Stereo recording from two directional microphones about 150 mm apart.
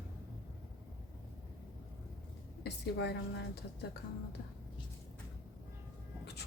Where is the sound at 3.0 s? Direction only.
90° left.